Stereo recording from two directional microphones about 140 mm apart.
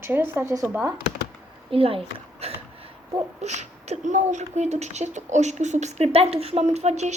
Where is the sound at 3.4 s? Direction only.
55° right (ahead or behind).